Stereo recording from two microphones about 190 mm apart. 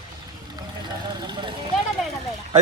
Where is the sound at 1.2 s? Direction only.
25° right (ahead or behind).